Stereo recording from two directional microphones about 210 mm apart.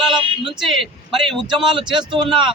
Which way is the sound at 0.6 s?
Centre (ahead or behind).